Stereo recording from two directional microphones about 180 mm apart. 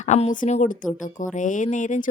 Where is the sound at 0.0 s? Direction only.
40° left (ahead or behind).